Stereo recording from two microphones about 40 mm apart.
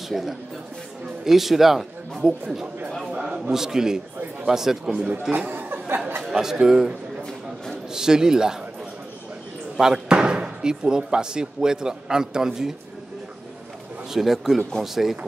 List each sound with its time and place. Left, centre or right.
0.1 s a man's voice: centre
3.2 s a sound: centre
3.5 s a man's voice: centre
5.5 s a sound: right
6.3 s a man's voice: centre
9.8 s speech: centre
14.1 s a man's voice: centre